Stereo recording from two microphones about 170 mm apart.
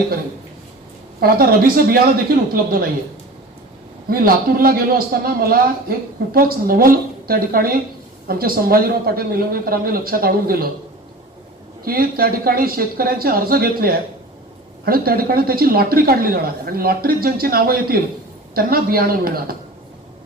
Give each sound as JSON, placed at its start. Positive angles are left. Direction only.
{"t": 1.2, "sound": "a man's voice", "side_deg": -60}
{"t": 4.1, "sound": "a man's voice", "side_deg": -60}
{"t": 11.9, "sound": "a man's voice", "side_deg": -60}